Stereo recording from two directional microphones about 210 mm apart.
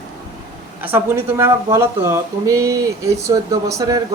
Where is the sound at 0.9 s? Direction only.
10° right (ahead or behind).